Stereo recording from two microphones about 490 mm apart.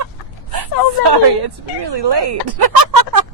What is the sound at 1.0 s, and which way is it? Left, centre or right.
Speech, right.